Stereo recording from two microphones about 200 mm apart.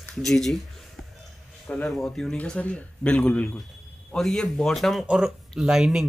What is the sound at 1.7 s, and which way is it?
Speech, 5° left (ahead or behind).